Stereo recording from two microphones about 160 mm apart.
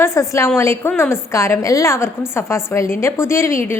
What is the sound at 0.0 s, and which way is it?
A woman's voice, 20° left (ahead or behind).